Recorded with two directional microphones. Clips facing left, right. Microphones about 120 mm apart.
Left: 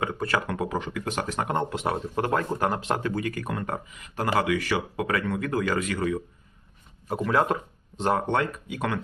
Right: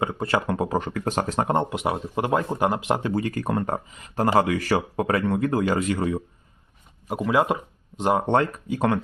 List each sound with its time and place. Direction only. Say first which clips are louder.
0.0 s speech: right 3 dB; 25° right (ahead or behind)
0.8 s speech: right 4 dB; 45° right (ahead or behind)
1.7 s speech: right 2 dB; 15° right (ahead or behind)
3.2 s speech: right 5 dB; 30° right (ahead or behind)
7.1 s speech: right 2 dB; 10° right (ahead or behind)
8.3 s speech: right 5 dB; 30° right (ahead or behind)